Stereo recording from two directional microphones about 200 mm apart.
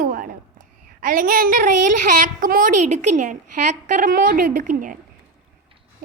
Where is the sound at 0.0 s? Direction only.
40° right (ahead or behind).